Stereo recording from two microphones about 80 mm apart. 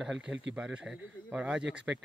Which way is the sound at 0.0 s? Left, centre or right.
Centre.